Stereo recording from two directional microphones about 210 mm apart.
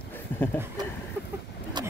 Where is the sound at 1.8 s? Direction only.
20° right (ahead or behind).